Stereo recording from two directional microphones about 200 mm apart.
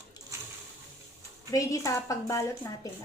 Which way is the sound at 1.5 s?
15° left (ahead or behind).